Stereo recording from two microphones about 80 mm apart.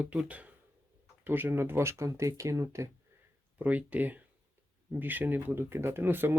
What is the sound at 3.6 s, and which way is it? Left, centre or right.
Speech, centre.